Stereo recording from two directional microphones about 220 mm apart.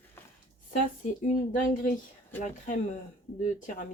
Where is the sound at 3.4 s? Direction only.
35° left (ahead or behind).